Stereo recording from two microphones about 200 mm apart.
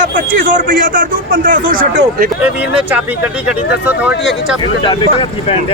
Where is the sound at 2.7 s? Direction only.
5° right (ahead or behind).